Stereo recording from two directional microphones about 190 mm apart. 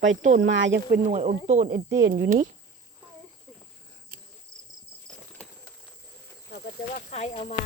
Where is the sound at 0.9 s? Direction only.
40° right (ahead or behind).